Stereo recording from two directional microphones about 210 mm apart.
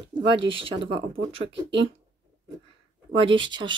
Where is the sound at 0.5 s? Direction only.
25° right (ahead or behind).